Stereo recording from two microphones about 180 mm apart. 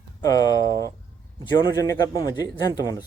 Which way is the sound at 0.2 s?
20° left (ahead or behind).